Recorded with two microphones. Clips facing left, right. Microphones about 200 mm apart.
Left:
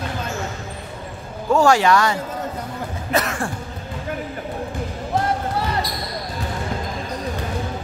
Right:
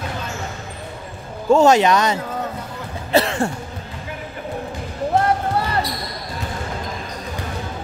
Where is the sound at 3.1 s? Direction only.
30° right (ahead or behind).